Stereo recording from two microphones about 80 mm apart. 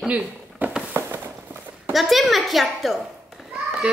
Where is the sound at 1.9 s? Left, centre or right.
Centre.